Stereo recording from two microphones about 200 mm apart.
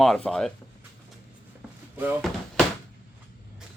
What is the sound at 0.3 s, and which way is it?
Speech, centre (ahead or behind).